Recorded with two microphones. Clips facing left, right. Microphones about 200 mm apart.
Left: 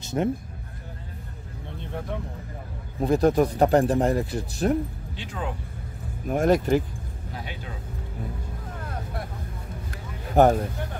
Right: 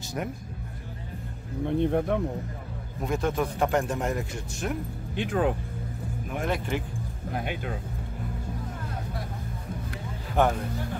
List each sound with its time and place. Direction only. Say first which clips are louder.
0.2 s speech: left 8 dB; 25° left (ahead or behind)
1.7 s speech: right 10 dB; 55° right (ahead or behind)
3.0 s speech: left 7 dB; 35° left (ahead or behind)
5.1 s speech: right 10 dB; 55° right (ahead or behind)
6.2 s speech: left 10 dB; 40° left (ahead or behind)
7.3 s speech: right 6 dB; 55° right (ahead or behind)
10.3 s speech: left 6 dB; 40° left (ahead or behind)